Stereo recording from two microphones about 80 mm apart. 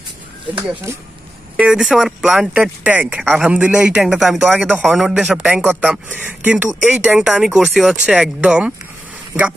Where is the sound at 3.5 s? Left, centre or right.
Centre.